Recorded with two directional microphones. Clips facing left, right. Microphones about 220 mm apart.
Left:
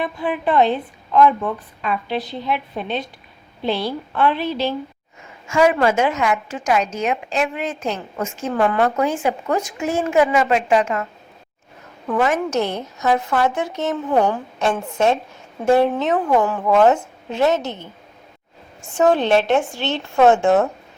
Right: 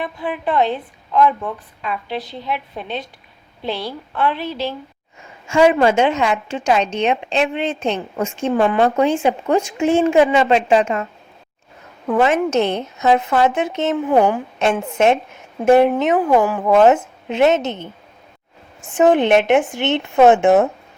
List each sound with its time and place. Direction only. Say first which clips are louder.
0.0 s speech: left 2 dB; 10° right (ahead or behind)
4.1 s speech: left 1 dB; 10° right (ahead or behind)
5.5 s a woman's voice: right 3 dB; 25° right (ahead or behind)
12.1 s a woman's voice: right 3 dB; 25° right (ahead or behind)
18.9 s a woman's voice: right 3 dB; 20° right (ahead or behind)